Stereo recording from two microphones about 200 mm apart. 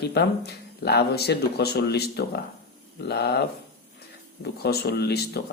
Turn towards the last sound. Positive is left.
turn(degrees=55)  # may be behind; listen again after turning